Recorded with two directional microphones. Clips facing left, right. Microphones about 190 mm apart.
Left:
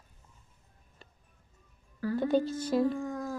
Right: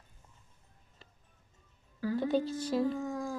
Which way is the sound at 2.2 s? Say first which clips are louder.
Left 4 dB; 55° left (ahead or behind).